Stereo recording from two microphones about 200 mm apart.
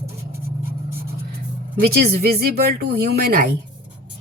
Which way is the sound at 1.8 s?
50° right (ahead or behind).